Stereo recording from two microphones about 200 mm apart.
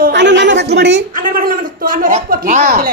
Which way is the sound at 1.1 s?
45° right (ahead or behind).